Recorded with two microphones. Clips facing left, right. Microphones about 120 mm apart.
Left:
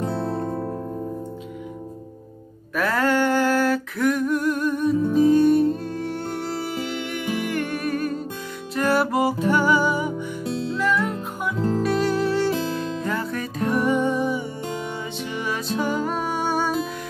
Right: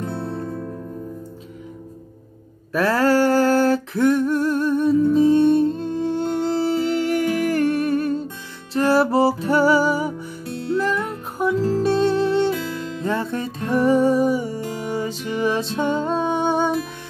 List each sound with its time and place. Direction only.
0.3 s music: 45° left (ahead or behind)
2.7 s a sound: 30° right (ahead or behind)
8.7 s music: 30° right (ahead or behind)